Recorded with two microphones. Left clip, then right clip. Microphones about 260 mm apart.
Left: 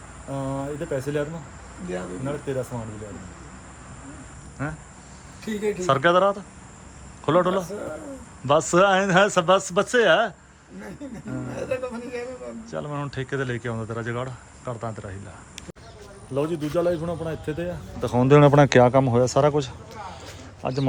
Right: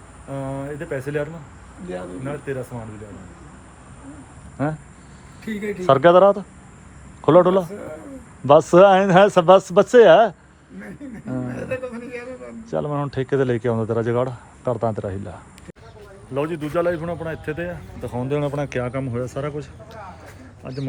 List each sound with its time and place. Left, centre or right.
0.3 s a man's voice: centre
4.6 s speech: centre
5.8 s speech: centre
12.7 s speech: centre
16.3 s a man's voice: centre
18.0 s speech: left
18.8 s a man's voice: centre